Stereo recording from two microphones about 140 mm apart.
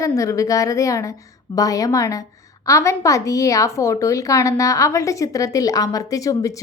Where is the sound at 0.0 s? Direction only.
20° left (ahead or behind).